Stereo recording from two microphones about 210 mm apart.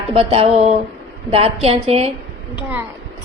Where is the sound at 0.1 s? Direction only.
25° right (ahead or behind).